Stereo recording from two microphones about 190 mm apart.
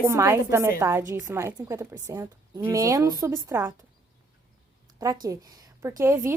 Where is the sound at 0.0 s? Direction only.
15° right (ahead or behind).